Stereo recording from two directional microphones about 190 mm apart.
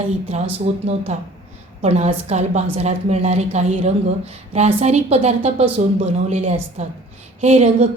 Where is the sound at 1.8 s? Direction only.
35° right (ahead or behind).